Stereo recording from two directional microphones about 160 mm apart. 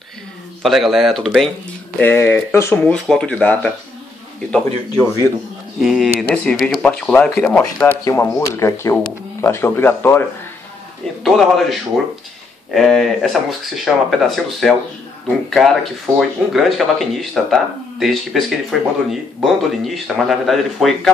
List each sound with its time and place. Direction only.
0.6 s speech: centre (ahead or behind)
2.0 s speech: 10° left (ahead or behind)
5.8 s speech: 5° right (ahead or behind); by 10.2 s 15° left (ahead or behind)
11.2 s speech: centre (ahead or behind)